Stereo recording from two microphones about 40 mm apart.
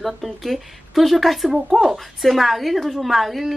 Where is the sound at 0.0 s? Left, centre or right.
Centre.